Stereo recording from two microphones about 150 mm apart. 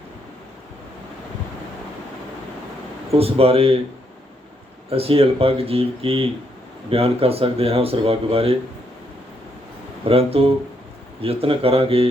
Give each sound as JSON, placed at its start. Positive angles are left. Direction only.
{"t": 3.1, "sound": "speech", "side_deg": -40}
{"t": 4.9, "sound": "speech", "side_deg": -40}
{"t": 10.0, "sound": "speech", "side_deg": -40}